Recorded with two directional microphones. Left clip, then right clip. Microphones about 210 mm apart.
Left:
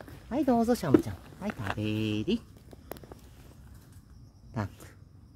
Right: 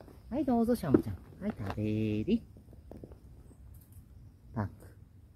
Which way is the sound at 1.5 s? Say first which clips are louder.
Left 5 dB; 10° left (ahead or behind).